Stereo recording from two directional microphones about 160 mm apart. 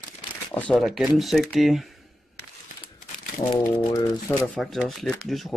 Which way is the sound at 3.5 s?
25° left (ahead or behind).